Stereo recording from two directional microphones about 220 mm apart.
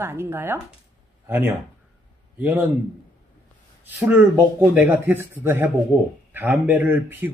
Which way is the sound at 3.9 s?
10° right (ahead or behind).